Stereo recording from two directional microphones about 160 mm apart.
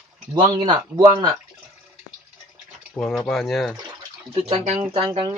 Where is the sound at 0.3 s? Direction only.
30° right (ahead or behind).